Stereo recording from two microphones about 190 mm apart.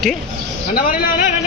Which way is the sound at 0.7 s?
50° left (ahead or behind).